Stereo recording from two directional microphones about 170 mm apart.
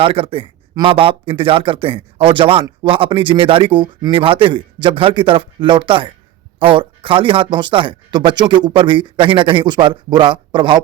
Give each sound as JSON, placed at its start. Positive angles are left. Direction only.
{"t": 0.0, "sound": "speech", "side_deg": -30}